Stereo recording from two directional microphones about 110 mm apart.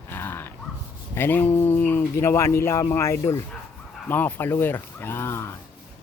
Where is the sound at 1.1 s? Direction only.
20° left (ahead or behind).